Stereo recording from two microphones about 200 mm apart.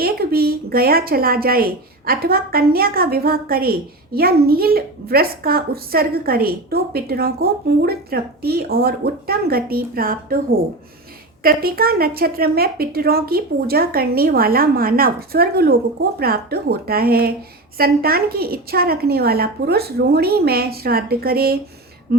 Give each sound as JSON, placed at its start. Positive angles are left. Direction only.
{"t": 0.0, "sound": "a woman's voice", "side_deg": -50}
{"t": 11.4, "sound": "a woman's voice", "side_deg": -50}